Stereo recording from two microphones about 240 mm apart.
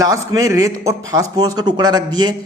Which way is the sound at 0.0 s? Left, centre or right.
Centre.